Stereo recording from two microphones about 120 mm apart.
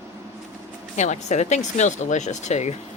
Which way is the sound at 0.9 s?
80° left.